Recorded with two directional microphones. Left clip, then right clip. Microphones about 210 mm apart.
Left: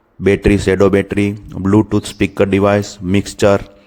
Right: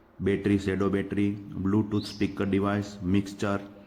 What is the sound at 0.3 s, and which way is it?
Speech, 50° left (ahead or behind).